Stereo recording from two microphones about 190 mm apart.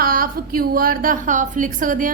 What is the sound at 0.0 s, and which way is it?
A woman's voice, 50° right (ahead or behind).